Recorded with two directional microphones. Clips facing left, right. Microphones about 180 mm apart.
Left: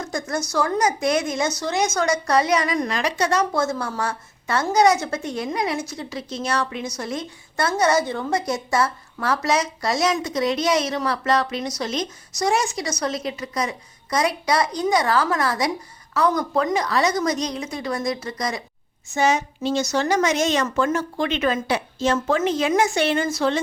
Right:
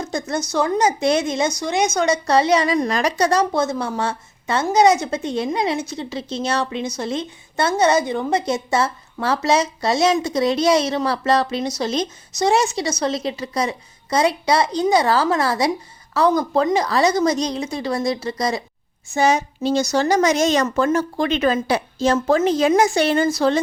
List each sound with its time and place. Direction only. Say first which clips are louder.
0.0 s a woman's voice: right 2 dB; 20° right (ahead or behind); by 3.4 s 40° right (ahead or behind)
3.5 s a woman's voice: right 3 dB; 20° right (ahead or behind); by 23.6 s 35° right (ahead or behind)